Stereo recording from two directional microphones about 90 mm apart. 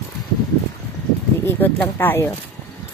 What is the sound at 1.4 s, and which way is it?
Speech, 20° left (ahead or behind).